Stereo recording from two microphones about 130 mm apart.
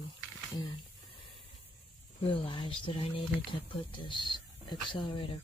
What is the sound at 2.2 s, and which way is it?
Speech, 45° left (ahead or behind).